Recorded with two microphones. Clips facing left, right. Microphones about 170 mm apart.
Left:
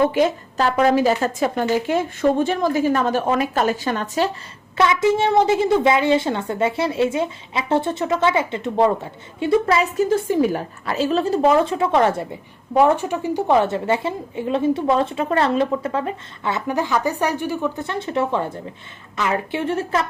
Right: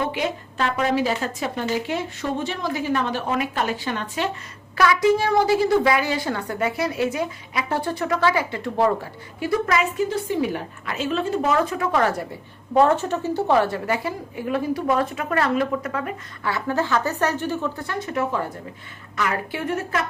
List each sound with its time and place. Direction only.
0.1 s a woman's voice: 45° left (ahead or behind)
4.8 s a woman's voice: 25° left (ahead or behind)
10.0 s a woman's voice: 45° left (ahead or behind)
11.5 s a woman's voice: 25° left (ahead or behind)
12.7 s a woman's voice: 10° left (ahead or behind)
17.8 s a woman's voice: 25° left (ahead or behind)